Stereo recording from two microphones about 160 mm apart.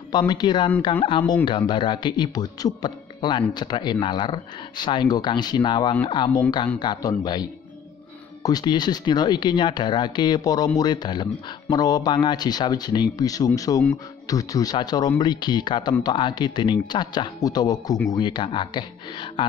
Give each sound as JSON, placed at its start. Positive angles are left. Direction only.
{"t": 0.1, "sound": "speech", "side_deg": 25}